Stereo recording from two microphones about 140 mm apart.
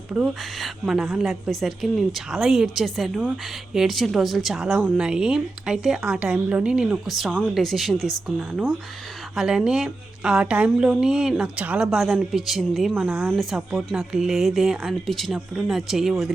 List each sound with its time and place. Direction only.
0.1 s speech: 5° right (ahead or behind)
12.9 s speech: 10° right (ahead or behind)
13.3 s speech: centre (ahead or behind)